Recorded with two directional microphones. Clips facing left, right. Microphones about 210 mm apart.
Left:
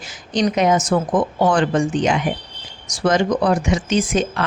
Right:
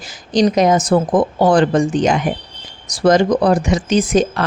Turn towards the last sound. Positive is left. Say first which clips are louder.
# right 4 dB
turn(degrees=-40)  # may be behind; listen again after turning